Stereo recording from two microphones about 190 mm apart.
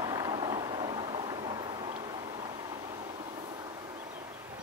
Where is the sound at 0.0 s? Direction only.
20° right (ahead or behind).